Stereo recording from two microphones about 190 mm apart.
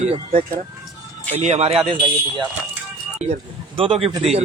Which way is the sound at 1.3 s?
35° right (ahead or behind).